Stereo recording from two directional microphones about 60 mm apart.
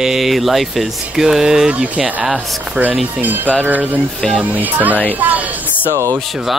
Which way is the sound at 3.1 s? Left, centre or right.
Right.